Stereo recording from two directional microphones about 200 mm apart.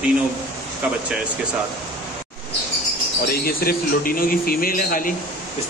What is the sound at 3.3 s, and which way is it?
A man's voice, 50° left (ahead or behind).